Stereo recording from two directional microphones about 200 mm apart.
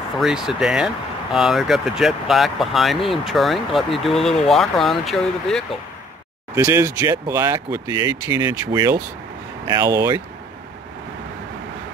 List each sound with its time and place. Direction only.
0.2 s speech: centre (ahead or behind)
6.5 s speech: 15° right (ahead or behind)